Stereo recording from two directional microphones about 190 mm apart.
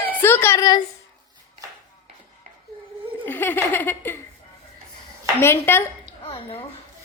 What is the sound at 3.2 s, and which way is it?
Speech, 10° left (ahead or behind).